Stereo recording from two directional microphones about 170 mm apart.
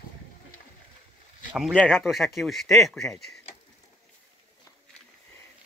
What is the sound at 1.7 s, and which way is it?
Speech, 5° left (ahead or behind).